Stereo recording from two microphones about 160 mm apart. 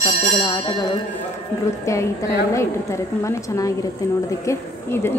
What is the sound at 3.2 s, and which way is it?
A woman's voice, 20° left (ahead or behind).